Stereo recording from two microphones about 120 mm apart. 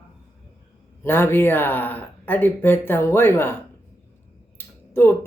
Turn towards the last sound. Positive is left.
turn(degrees=20)  # may be behind; listen again after turning